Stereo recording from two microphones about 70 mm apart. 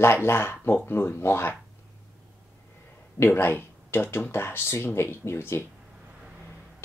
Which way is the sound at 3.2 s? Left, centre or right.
Left.